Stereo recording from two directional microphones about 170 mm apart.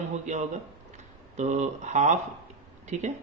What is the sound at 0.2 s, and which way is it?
A man's voice, 45° right (ahead or behind).